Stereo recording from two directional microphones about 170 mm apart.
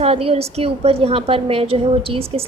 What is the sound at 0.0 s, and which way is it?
A woman's voice, 35° right (ahead or behind).